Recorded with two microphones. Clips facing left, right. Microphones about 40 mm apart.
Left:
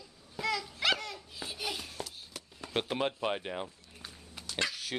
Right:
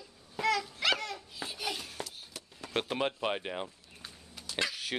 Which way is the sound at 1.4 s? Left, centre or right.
Centre.